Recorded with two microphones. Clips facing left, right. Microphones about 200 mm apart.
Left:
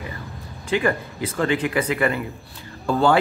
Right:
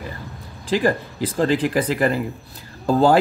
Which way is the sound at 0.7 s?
35° right (ahead or behind).